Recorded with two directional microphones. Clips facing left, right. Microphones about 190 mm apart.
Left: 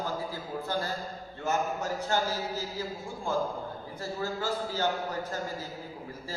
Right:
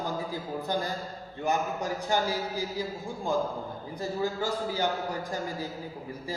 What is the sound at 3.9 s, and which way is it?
Speech, 15° right (ahead or behind).